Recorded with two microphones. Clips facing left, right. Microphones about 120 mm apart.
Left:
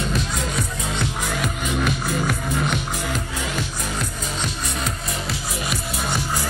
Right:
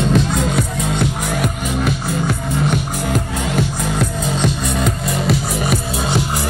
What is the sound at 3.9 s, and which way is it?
Music, 85° right.